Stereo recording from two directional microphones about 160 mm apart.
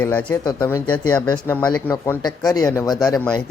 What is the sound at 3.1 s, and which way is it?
Speech, 5° left (ahead or behind).